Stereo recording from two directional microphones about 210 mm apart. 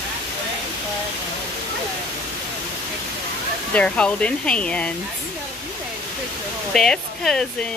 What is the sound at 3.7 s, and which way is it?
Speech, 5° left (ahead or behind).